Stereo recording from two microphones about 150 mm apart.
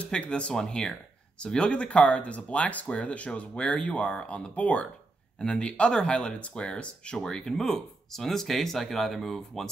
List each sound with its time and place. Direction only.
0.0 s speech: 5° left (ahead or behind)